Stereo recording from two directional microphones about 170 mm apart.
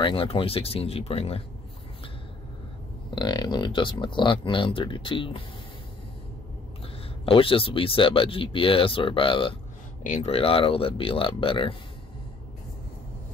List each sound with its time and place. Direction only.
0.0 s speech: 30° left (ahead or behind)
3.2 s speech: 25° left (ahead or behind)
7.2 s speech: 30° left (ahead or behind)
10.0 s speech: 40° left (ahead or behind)